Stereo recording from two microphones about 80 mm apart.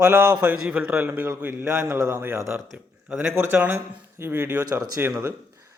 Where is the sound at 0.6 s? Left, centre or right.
Centre; by 2.0 s right.